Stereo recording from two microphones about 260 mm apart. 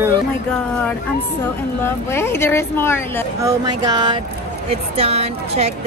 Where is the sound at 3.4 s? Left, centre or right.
Centre.